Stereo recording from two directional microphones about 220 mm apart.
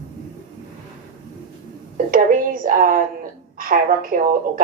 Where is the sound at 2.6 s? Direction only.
40° right (ahead or behind).